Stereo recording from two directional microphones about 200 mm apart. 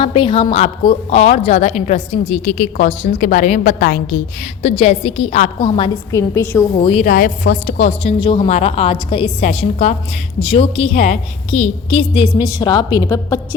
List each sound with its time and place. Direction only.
0.0 s a woman's voice: 25° left (ahead or behind); by 4.2 s 45° left (ahead or behind)
4.6 s a woman's voice: 30° left (ahead or behind); by 6.7 s 15° left (ahead or behind)
6.7 s a woman's voice: 30° left (ahead or behind)
7.1 s a woman's voice: 40° left (ahead or behind); by 13.0 s 20° left (ahead or behind)